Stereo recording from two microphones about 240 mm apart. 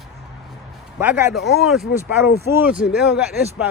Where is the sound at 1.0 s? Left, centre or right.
Centre.